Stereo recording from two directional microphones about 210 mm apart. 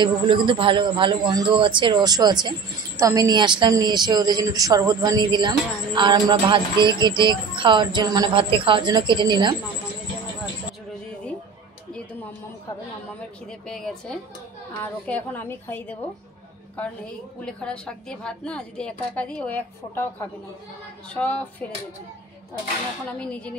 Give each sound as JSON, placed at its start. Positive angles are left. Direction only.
{"t": 0.0, "sound": "a woman's voice", "side_deg": -20}
{"t": 11.9, "sound": "a sound", "side_deg": 5}
{"t": 13.5, "sound": "a woman's voice", "side_deg": 0}
{"t": 23.0, "sound": "a woman's voice", "side_deg": 5}